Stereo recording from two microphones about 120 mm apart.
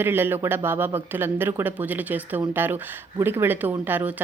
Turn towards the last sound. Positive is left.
turn(degrees=-15)  # may be behind; listen again after turning